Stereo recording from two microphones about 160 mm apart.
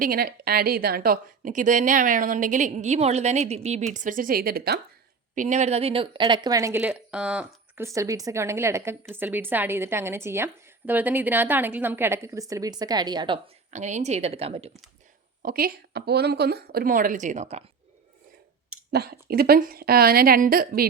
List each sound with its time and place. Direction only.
0.0 s a woman's voice: 65° right (ahead or behind); by 3.8 s 45° right (ahead or behind)
3.9 s a woman's voice: 55° right (ahead or behind); by 4.8 s 75° right (ahead or behind)
5.3 s speech: 50° right (ahead or behind); by 7.9 s 5° right (ahead or behind)
7.9 s a woman's voice: 20° right (ahead or behind)
13.7 s speech: 45° right (ahead or behind)
15.4 s a woman's voice: 65° right (ahead or behind); by 17.6 s 45° right (ahead or behind)
18.9 s a woman's voice: 85° right; by 20.8 s 65° right (ahead or behind)